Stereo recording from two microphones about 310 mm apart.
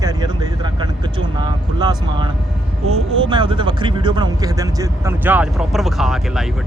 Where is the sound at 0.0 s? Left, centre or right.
Centre.